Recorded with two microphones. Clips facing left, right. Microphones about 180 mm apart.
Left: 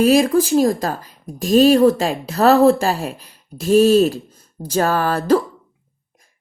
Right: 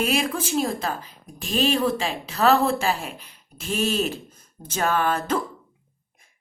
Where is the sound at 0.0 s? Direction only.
35° left (ahead or behind).